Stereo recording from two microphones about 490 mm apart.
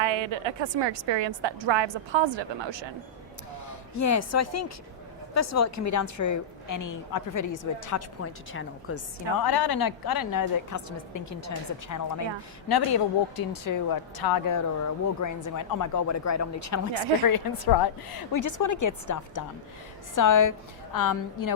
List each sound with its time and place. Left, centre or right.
0.0 s a woman's voice: right
3.9 s a woman's voice: left
9.4 s a woman's voice: left
17.2 s a woman's voice: left